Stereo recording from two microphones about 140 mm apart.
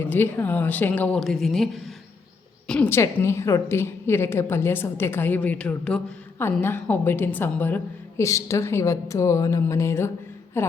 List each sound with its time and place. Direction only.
0.0 s a woman's voice: 15° left (ahead or behind)
2.9 s a woman's voice: 20° left (ahead or behind)